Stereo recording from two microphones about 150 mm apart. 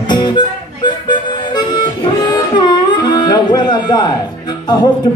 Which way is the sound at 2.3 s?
30° left (ahead or behind).